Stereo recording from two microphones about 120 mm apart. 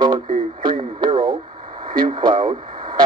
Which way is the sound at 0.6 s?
40° right (ahead or behind).